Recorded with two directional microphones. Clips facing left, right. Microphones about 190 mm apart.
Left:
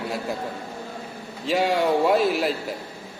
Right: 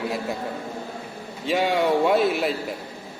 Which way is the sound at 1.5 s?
Centre (ahead or behind).